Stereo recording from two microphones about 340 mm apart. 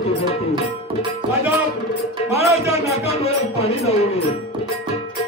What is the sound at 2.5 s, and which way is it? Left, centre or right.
Music, centre.